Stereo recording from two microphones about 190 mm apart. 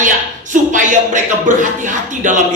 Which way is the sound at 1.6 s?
40° right (ahead or behind).